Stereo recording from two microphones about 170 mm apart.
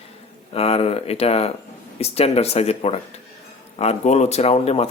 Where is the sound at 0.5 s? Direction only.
35° left (ahead or behind).